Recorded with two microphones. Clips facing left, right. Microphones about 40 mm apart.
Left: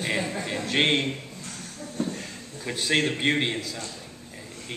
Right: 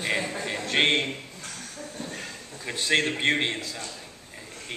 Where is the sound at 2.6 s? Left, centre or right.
Centre.